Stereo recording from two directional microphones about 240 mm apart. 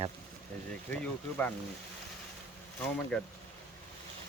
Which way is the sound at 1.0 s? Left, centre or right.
Centre.